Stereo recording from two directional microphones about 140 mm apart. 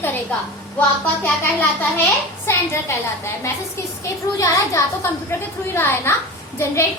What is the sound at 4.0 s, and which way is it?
A woman's voice, 20° left (ahead or behind).